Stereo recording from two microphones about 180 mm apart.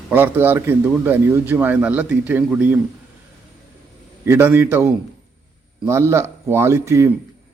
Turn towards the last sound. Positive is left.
turn(degrees=-15)  # may be behind; listen again after turning